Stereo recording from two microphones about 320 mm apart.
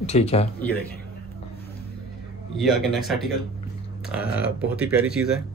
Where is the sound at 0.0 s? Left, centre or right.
Centre.